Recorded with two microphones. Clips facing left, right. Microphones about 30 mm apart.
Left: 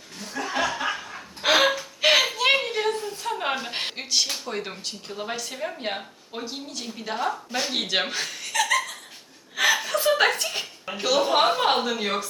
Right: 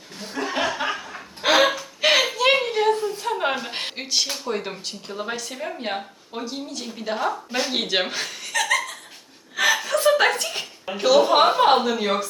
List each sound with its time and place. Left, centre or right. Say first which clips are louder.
0.2 s chuckle: right 2 dB; right
0.4 s chuckle: right 2 dB; centre
0.9 s chicken: right 2 dB; centre
2.0 s a sound: right 1 dB; centre
7.5 s speech: right 2 dB; centre
9.6 s chuckle: right 2 dB; centre